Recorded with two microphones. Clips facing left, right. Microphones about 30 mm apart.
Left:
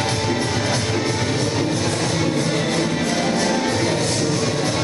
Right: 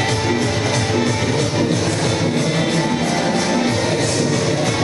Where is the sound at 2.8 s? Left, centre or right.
Centre.